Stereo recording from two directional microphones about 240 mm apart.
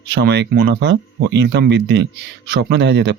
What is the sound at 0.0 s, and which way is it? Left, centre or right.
Speech, right.